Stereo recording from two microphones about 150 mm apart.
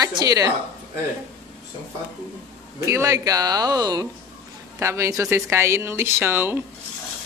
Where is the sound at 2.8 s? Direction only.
20° right (ahead or behind).